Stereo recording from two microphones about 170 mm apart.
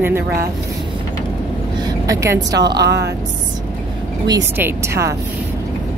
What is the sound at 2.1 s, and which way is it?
Speech, 20° right (ahead or behind).